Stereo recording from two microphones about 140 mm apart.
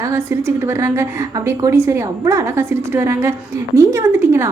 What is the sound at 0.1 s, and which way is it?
A woman's voice, 20° right (ahead or behind).